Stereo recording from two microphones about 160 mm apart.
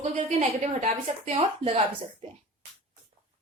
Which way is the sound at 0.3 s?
45° right (ahead or behind).